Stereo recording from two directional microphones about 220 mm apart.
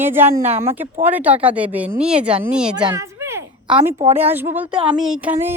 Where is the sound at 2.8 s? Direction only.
15° right (ahead or behind).